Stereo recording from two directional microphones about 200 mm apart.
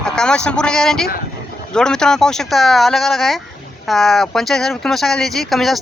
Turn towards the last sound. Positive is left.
turn(degrees=0)  # may be behind; listen again after turning